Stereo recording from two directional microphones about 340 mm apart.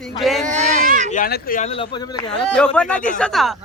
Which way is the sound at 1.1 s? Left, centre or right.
Left.